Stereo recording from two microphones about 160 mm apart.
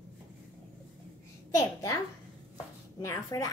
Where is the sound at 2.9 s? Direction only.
20° left (ahead or behind).